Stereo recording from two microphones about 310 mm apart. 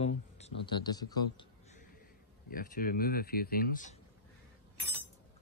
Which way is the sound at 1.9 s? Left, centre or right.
Left.